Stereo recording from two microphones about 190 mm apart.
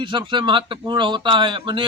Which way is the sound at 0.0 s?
25° right (ahead or behind).